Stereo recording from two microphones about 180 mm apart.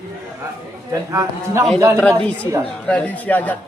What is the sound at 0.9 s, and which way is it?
Speech, 20° right (ahead or behind).